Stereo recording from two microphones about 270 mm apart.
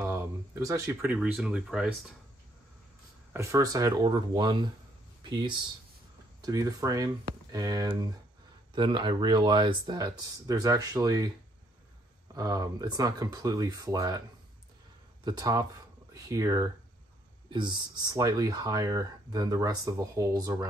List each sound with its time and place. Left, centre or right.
0.0 s speech: centre
3.3 s speech: centre
12.4 s speech: centre
15.2 s speech: centre